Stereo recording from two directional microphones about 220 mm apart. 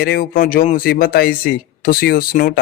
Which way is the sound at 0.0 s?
45° left (ahead or behind).